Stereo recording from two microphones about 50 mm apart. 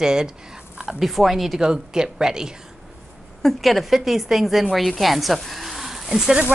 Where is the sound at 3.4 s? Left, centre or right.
Centre.